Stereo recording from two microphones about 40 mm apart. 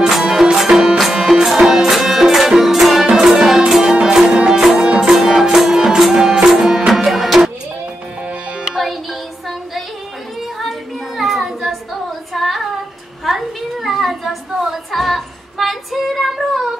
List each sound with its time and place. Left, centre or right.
0.1 s music: centre
3.1 s music: centre
11.1 s child singing: centre
13.2 s a sound: centre